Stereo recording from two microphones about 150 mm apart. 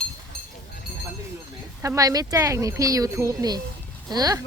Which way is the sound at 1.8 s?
20° right (ahead or behind).